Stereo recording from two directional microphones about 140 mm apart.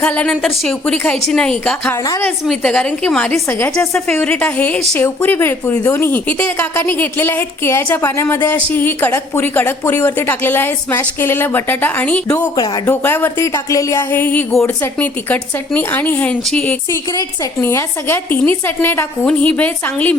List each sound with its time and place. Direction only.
0.0 s a woman's voice: 10° left (ahead or behind)
12.5 s speech: 30° left (ahead or behind)
12.8 s speech: 15° left (ahead or behind)
16.9 s speech: 25° left (ahead or behind)